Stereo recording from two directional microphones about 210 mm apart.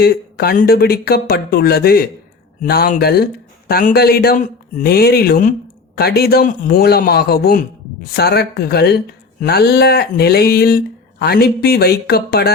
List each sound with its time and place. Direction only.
0.0 s speech: 50° left (ahead or behind)